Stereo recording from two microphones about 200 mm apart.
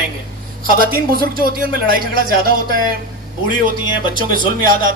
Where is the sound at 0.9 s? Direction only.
45° right (ahead or behind).